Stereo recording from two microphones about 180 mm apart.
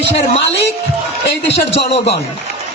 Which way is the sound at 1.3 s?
75° left (ahead or behind).